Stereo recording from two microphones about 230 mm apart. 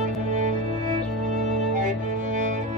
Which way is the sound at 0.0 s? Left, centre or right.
Right.